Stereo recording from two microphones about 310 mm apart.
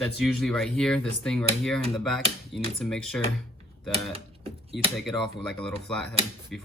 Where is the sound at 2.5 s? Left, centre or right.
Left.